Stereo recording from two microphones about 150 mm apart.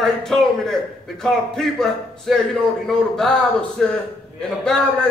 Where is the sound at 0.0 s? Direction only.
5° left (ahead or behind).